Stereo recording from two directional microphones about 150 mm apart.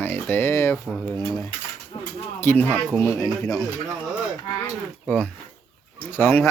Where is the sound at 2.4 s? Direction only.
15° left (ahead or behind).